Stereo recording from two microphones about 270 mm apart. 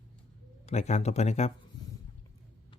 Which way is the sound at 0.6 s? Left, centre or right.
Left.